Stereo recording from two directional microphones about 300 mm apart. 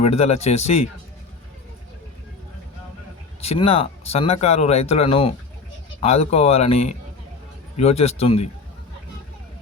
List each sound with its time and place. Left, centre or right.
0.0 s speech: left
3.4 s speech: centre